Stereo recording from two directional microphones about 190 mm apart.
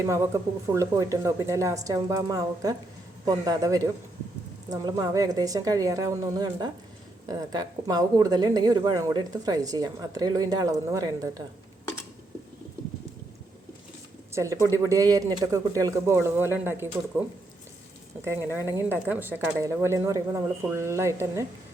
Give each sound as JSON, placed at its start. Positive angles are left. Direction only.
{"t": 0.0, "sound": "a woman's voice", "side_deg": -15}
{"t": 14.3, "sound": "speech", "side_deg": -15}
{"t": 18.6, "sound": "speech", "side_deg": -10}